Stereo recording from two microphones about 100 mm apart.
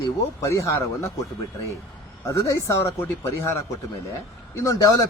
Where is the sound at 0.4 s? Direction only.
30° left (ahead or behind).